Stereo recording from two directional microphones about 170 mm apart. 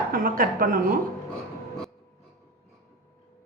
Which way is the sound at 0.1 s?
55° right (ahead or behind).